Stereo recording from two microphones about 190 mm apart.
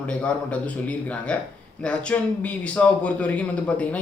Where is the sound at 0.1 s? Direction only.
5° left (ahead or behind).